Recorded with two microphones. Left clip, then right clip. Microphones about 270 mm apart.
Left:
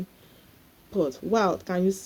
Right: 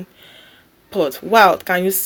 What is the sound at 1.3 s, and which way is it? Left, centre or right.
Speech, centre.